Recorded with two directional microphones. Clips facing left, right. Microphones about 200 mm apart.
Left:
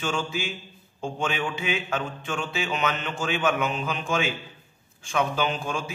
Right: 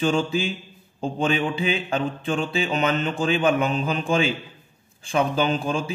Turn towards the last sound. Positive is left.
turn(degrees=-30)  # may be behind; listen again after turning